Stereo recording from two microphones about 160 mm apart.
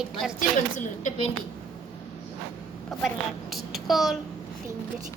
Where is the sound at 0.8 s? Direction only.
50° left (ahead or behind).